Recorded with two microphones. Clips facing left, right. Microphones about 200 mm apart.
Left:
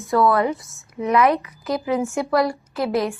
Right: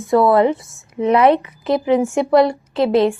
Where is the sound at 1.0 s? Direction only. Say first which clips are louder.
Right 5 dB; 30° right (ahead or behind).